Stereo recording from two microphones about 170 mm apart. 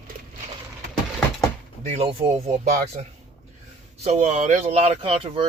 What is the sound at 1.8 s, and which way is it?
Speech, 40° right (ahead or behind).